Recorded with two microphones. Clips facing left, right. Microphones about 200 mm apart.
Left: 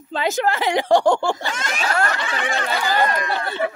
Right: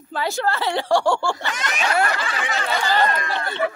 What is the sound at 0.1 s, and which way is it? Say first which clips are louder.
A woman's voice: left 3 dB; 20° left (ahead or behind).